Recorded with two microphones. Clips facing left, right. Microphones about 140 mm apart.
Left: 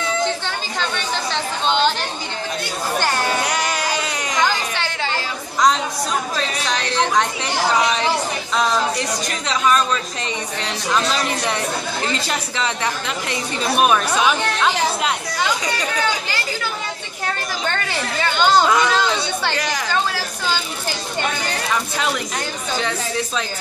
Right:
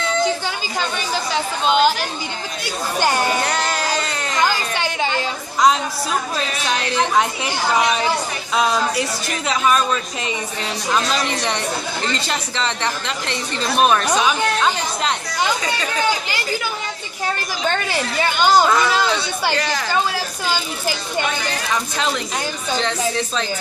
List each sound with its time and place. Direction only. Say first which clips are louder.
0.7 s a woman's voice: right 1 dB; 5° right (ahead or behind)
3.4 s music: right 1 dB; 10° left (ahead or behind)
4.7 s a sound: right 3 dB; 15° right (ahead or behind)
6.3 s speech: even; 5° right (ahead or behind)
8.5 s a woman's voice: right 1 dB; 5° right (ahead or behind)
19.5 s a woman's voice: right 2 dB; 10° left (ahead or behind)
19.9 s a woman's voice: right 1 dB; 15° right (ahead or behind)
22.8 s a woman's voice: right 2 dB; 5° left (ahead or behind)